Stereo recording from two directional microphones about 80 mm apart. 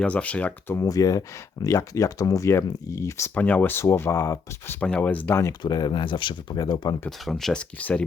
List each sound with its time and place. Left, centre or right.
0.0 s speech: centre
0.9 s speech: left
3.3 s speech: left
4.9 s speech: centre
5.3 s speech: left
5.6 s speech: left
6.6 s speech: left
7.3 s speech: centre
7.8 s speech: centre